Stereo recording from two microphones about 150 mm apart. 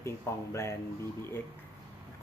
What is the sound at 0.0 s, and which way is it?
Speech, 20° left (ahead or behind).